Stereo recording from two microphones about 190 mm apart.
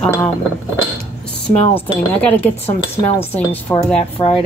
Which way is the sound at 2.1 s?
10° left (ahead or behind).